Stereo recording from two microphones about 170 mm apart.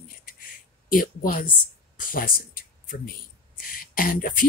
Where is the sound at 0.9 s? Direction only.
55° left (ahead or behind).